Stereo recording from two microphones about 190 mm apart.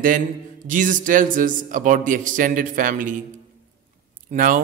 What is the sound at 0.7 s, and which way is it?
A man's voice, 45° right (ahead or behind).